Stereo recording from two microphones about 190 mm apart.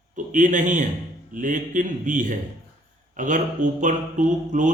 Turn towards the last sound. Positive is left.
turn(degrees=-40)  # may be behind; listen again after turning